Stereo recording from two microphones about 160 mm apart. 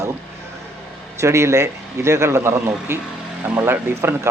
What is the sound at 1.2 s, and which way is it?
Speech, 15° right (ahead or behind).